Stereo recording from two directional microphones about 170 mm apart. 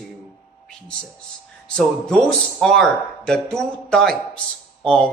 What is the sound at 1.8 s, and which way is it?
A man's voice, 5° left (ahead or behind).